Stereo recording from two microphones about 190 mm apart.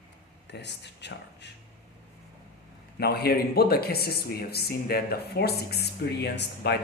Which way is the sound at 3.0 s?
55° left (ahead or behind).